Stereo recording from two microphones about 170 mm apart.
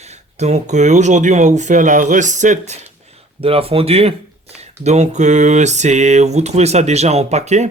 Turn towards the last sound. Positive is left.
turn(degrees=-40)  # may be behind; listen again after turning